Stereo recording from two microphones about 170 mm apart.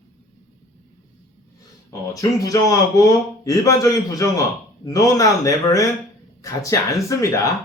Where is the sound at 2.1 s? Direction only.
20° left (ahead or behind).